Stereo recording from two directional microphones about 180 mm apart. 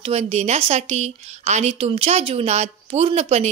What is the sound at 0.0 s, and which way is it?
A woman's voice, 35° right (ahead or behind).